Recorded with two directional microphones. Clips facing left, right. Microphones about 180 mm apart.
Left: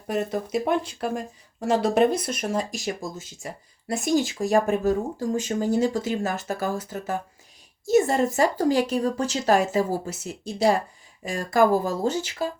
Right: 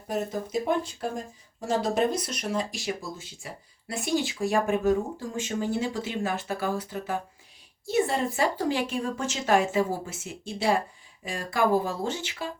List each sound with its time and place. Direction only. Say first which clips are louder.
0.1 s speech: left 3 dB; 70° left (ahead or behind); by 12.5 s 40° left (ahead or behind)